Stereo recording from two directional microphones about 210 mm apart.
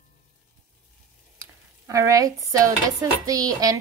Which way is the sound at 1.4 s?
15° right (ahead or behind).